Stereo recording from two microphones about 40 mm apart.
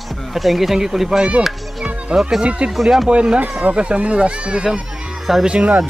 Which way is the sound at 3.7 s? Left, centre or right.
Right.